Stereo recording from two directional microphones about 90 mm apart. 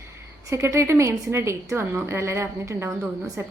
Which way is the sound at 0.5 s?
30° right (ahead or behind).